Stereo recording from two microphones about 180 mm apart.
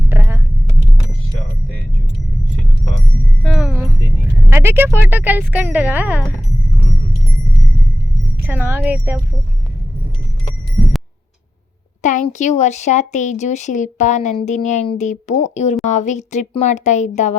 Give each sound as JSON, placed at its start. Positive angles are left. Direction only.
{"t": 0.1, "sound": "vehicle", "side_deg": -15}
{"t": 3.4, "sound": "music", "side_deg": -5}
{"t": 4.4, "sound": "speech", "side_deg": -15}
{"t": 8.4, "sound": "a sound", "side_deg": -10}
{"t": 12.0, "sound": "speech", "side_deg": 40}